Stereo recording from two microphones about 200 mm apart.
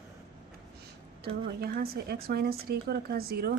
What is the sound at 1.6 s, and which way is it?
Speech, 50° right (ahead or behind).